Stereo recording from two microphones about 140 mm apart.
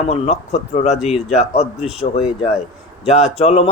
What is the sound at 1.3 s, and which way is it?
Speech, 50° left (ahead or behind).